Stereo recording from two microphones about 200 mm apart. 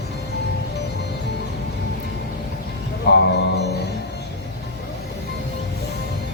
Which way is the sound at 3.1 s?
55° left (ahead or behind).